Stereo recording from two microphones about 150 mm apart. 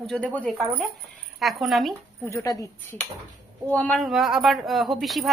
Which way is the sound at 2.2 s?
20° left (ahead or behind).